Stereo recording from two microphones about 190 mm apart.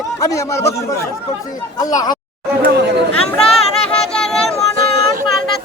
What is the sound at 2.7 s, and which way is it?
Chatter, 60° right (ahead or behind).